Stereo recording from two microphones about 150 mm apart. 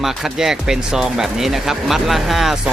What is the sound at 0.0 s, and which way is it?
Speech, 5° right (ahead or behind).